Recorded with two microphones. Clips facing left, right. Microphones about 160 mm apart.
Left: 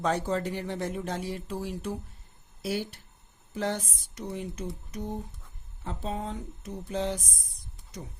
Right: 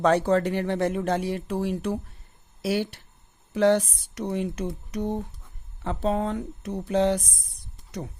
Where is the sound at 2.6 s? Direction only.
80° right.